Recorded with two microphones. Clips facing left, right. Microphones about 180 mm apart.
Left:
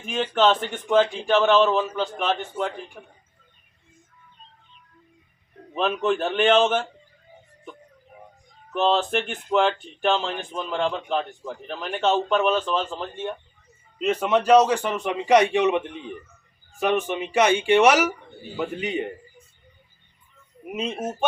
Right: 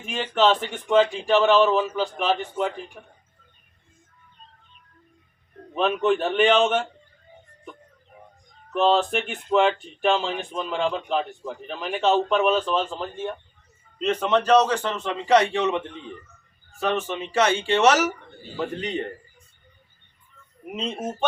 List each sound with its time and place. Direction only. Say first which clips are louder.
0.0 s speech: left 1 dB; centre (ahead or behind)
5.7 s speech: right 2 dB; centre (ahead or behind)
8.7 s a man's voice: right 1 dB; centre (ahead or behind)
20.7 s a man's voice: left 1 dB; 10° left (ahead or behind)